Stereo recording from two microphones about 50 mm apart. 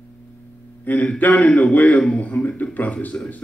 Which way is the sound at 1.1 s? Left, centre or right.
Left.